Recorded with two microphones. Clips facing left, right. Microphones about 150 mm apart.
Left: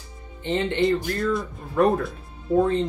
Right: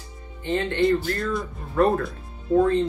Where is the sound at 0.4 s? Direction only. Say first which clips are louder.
Even; 20° left (ahead or behind).